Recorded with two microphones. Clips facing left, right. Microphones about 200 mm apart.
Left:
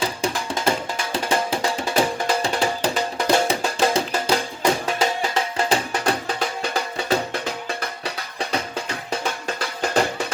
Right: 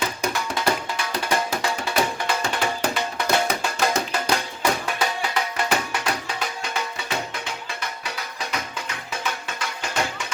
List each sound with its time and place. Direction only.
0.0 s music: 30° left (ahead or behind)